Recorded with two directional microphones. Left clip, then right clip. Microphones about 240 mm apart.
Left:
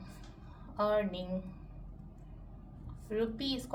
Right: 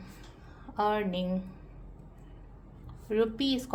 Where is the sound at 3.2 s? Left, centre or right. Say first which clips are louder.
Right 6 dB; right.